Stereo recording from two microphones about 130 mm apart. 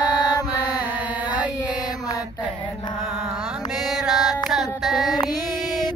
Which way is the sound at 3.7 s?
Centre (ahead or behind).